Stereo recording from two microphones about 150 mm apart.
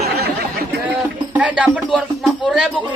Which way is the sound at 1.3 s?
10° right (ahead or behind).